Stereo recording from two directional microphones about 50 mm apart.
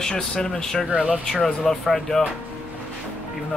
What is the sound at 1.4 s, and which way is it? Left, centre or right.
Speech, centre.